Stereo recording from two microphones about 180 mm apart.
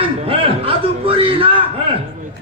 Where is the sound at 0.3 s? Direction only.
30° right (ahead or behind).